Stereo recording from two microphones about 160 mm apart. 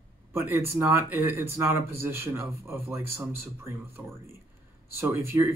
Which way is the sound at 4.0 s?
20° right (ahead or behind).